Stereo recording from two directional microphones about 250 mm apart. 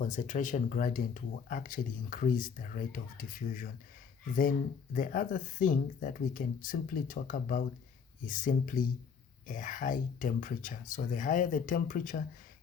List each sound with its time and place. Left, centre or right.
0.0 s speech: left
4.9 s speech: left